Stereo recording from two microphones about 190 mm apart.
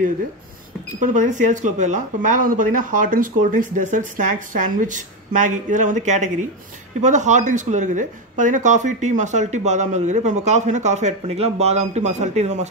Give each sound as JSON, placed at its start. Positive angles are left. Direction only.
{"t": 1.0, "sound": "speech", "side_deg": -40}